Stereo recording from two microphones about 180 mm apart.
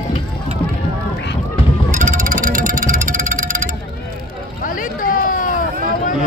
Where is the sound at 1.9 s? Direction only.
45° right (ahead or behind).